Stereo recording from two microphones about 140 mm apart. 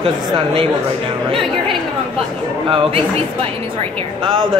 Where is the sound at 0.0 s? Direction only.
40° right (ahead or behind).